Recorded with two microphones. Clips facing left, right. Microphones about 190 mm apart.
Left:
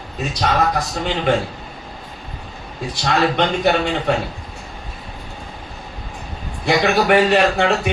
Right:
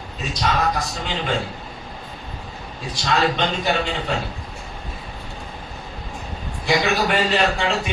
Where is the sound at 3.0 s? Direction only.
60° left (ahead or behind).